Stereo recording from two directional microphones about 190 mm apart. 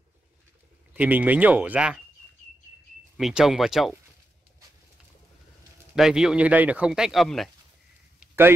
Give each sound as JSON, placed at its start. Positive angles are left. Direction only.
{"t": 0.9, "sound": "speech", "side_deg": -10}
{"t": 3.2, "sound": "speech", "side_deg": 0}
{"t": 5.9, "sound": "speech", "side_deg": -5}
{"t": 8.2, "sound": "a sound", "side_deg": -10}